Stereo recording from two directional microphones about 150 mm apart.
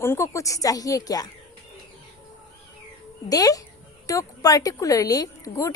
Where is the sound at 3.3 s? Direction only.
25° left (ahead or behind).